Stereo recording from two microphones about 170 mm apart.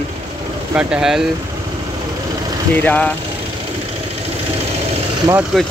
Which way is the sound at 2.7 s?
10° left (ahead or behind).